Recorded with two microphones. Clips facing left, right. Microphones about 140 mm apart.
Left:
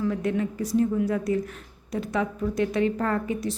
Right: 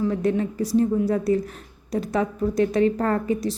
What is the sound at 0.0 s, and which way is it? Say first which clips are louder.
A woman's voice: right 3 dB; 35° right (ahead or behind).